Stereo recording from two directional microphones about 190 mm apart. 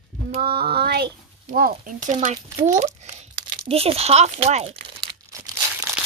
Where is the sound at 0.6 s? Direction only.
55° right (ahead or behind); by 5.1 s 30° right (ahead or behind).